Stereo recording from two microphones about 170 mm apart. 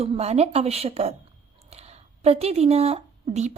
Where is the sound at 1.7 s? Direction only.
40° right (ahead or behind).